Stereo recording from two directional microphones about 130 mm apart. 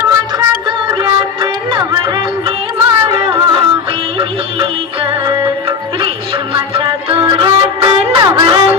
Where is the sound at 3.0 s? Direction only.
40° right (ahead or behind).